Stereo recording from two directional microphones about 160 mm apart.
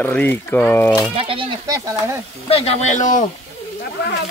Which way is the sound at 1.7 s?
20° right (ahead or behind).